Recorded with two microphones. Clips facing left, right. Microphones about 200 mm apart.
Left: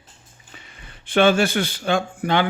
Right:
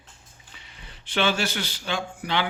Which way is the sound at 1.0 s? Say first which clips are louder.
Left 8 dB; 50° left (ahead or behind).